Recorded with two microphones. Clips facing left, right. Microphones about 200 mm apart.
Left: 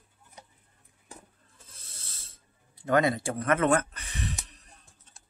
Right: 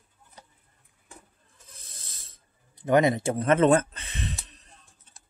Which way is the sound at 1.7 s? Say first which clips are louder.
Right 3 dB; 15° right (ahead or behind).